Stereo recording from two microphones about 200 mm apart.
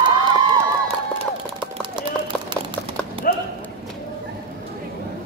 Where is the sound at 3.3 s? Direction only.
45° left (ahead or behind).